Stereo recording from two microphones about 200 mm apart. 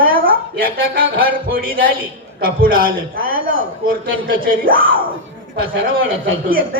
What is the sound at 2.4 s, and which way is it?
Speech, 45° right (ahead or behind).